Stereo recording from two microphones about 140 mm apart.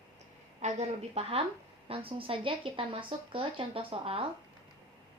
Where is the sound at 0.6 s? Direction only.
50° right (ahead or behind).